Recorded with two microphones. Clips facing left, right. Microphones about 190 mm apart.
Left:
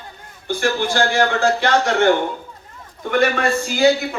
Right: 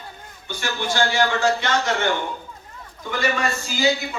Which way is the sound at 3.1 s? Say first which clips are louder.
Left 6 dB; 60° left (ahead or behind).